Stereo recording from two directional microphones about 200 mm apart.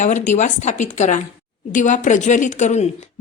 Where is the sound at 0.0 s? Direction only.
35° left (ahead or behind).